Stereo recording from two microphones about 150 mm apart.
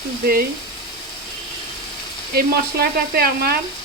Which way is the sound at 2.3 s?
90° right.